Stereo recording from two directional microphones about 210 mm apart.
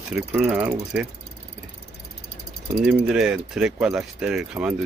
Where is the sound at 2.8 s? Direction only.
5° right (ahead or behind).